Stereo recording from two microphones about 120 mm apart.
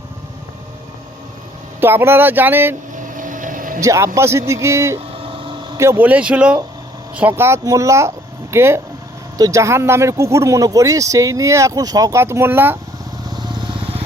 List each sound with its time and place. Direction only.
1.8 s speech: 20° right (ahead or behind)
2.9 s vehicle: 90° right
3.8 s speech: 25° right (ahead or behind)
13.3 s vehicle: 35° right (ahead or behind)